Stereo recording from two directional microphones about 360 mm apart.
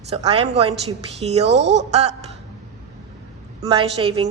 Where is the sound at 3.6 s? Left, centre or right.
Centre.